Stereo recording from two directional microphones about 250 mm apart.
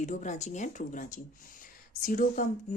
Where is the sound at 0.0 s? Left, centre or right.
Left.